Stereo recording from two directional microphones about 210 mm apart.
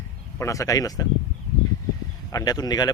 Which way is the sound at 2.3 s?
15° left (ahead or behind).